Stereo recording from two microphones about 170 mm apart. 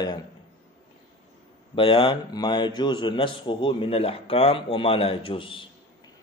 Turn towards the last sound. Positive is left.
turn(degrees=30)  # may be behind; listen again after turning